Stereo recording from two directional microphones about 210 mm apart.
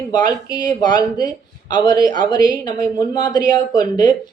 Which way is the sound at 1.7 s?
20° left (ahead or behind).